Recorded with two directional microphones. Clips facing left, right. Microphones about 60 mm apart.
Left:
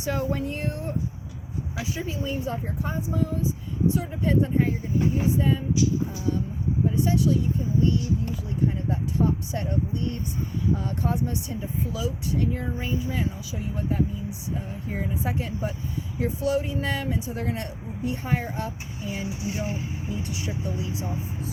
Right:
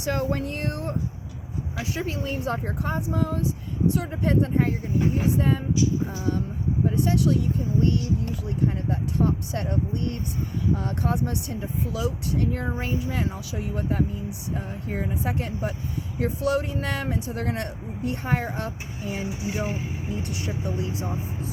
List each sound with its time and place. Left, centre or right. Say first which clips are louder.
0.0 s speech: right 1 dB; right
6.9 s speech: right 1 dB; right